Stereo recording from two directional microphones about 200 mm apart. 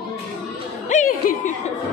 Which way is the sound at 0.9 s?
40° left (ahead or behind).